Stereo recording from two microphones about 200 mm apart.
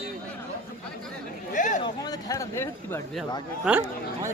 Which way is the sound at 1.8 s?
15° left (ahead or behind).